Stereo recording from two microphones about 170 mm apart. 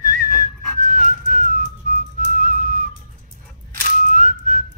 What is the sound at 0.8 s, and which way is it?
Music, 50° right (ahead or behind).